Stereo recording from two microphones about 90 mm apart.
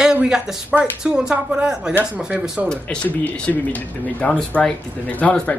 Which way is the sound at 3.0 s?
15° left (ahead or behind).